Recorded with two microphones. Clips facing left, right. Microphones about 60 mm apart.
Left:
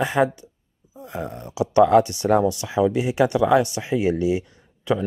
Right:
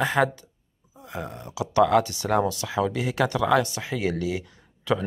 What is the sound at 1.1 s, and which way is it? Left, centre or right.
Speech, left.